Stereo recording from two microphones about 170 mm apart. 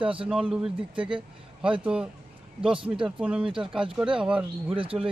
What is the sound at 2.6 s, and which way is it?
Speech, 30° right (ahead or behind).